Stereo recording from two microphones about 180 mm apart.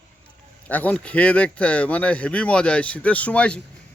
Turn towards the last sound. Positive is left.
turn(degrees=5)  # may be behind; listen again after turning